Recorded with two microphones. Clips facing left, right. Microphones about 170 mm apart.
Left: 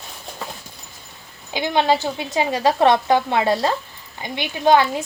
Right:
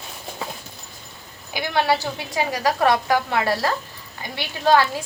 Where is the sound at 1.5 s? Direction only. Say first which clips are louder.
Left 3 dB; 20° left (ahead or behind).